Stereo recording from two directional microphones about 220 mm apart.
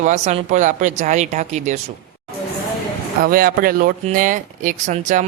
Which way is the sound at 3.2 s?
40° right (ahead or behind).